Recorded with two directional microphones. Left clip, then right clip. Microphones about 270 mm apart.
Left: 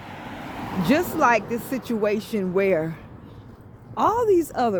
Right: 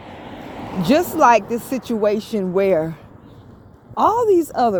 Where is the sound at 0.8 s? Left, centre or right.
Right.